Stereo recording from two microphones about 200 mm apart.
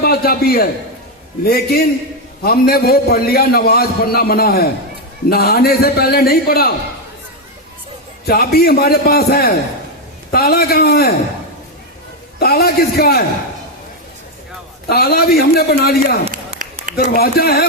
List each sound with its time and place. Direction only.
0.0 s a man's voice: 50° left (ahead or behind)
8.2 s a man's voice: 50° left (ahead or behind)
12.4 s a man's voice: 50° left (ahead or behind)
14.8 s a man's voice: 50° left (ahead or behind)
16.2 s run: 35° right (ahead or behind)
17.0 s a man's voice: 45° left (ahead or behind)